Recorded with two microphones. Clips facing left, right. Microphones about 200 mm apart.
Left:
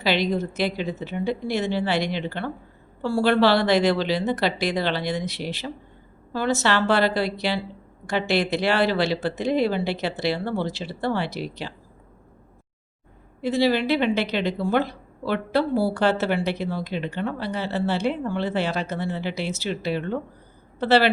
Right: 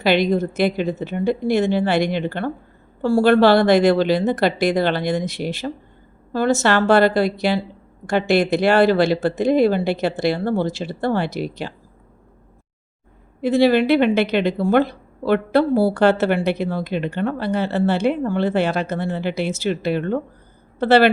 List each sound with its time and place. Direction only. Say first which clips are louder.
0.0 s speech: right 6 dB; 50° right (ahead or behind)
13.4 s a woman's voice: right 6 dB; 55° right (ahead or behind)